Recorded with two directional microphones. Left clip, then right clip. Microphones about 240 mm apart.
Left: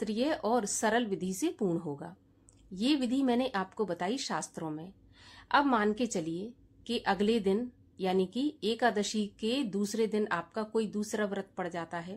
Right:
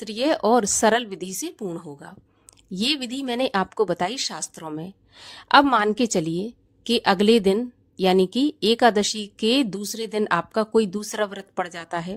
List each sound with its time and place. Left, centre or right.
0.0 s a woman's voice: right
4.3 s speech: centre
4.5 s a woman's voice: right